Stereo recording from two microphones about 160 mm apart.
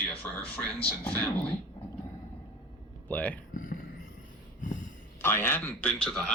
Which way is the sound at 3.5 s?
60° left (ahead or behind).